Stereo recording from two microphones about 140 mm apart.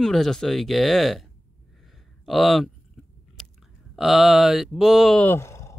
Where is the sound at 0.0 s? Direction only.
5° left (ahead or behind).